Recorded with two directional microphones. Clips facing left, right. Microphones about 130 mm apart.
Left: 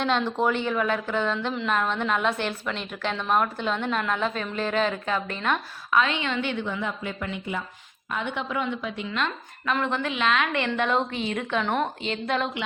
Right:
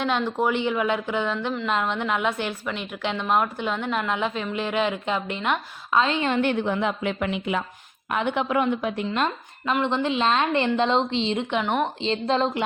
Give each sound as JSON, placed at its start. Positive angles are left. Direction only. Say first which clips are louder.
{"t": 0.0, "sound": "a woman's voice", "louder": "even", "side_deg": -10}
{"t": 5.9, "sound": "a woman's voice", "louder": "right 2 dB", "side_deg": -30}
{"t": 8.1, "sound": "a woman's voice", "louder": "right 6 dB", "side_deg": -60}
{"t": 9.8, "sound": "a woman's voice", "louder": "right 4 dB", "side_deg": -25}
{"t": 12.0, "sound": "a woman's voice", "louder": "right 4 dB", "side_deg": -30}